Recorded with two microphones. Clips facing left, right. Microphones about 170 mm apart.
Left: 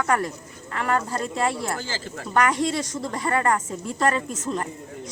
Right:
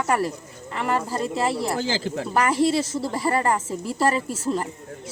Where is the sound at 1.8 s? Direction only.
90° right.